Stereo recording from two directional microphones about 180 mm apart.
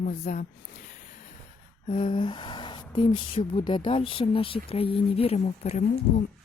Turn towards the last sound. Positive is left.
turn(degrees=40)  # may be behind; listen again after turning